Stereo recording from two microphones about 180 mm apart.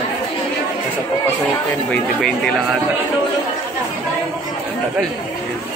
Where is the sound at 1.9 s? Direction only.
5° left (ahead or behind).